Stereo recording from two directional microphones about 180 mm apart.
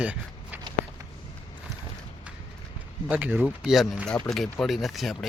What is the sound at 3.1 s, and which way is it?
Speech, 5° right (ahead or behind).